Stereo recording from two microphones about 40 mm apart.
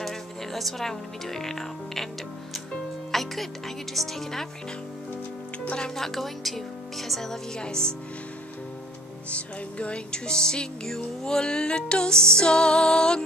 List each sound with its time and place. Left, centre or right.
0.0 s speech: centre
3.1 s speech: centre
5.9 s a woman's voice: centre
7.6 s music: left
9.3 s music: left